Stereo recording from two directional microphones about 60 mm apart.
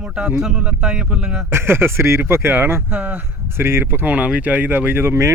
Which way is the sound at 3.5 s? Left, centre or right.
Right.